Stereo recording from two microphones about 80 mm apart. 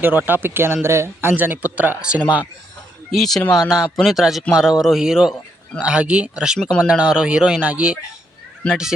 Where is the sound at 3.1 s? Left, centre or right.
Centre.